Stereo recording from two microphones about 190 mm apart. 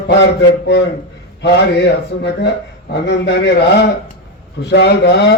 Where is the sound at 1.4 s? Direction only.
65° left (ahead or behind).